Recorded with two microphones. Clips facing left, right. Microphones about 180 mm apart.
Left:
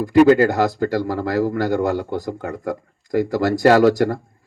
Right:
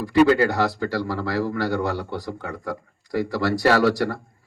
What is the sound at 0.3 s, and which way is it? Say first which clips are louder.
Speech: left 5 dB; 45° left (ahead or behind).